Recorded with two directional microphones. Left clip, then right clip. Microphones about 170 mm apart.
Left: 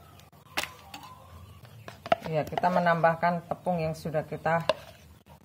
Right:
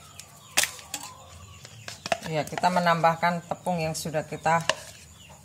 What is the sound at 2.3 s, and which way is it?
Speech, 10° left (ahead or behind).